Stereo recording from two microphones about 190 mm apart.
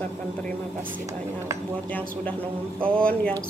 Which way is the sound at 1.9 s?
10° left (ahead or behind).